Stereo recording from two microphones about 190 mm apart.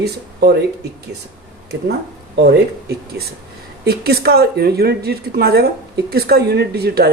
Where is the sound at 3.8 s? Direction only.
55° right (ahead or behind).